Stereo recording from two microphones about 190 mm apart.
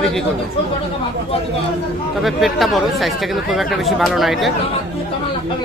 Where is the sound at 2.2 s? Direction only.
Centre (ahead or behind).